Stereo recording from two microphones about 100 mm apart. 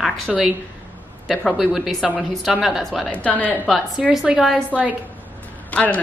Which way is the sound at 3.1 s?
15° left (ahead or behind).